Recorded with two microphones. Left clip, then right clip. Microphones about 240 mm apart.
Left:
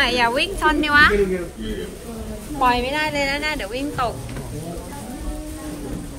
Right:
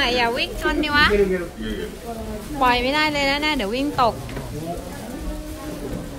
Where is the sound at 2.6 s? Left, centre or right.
Right.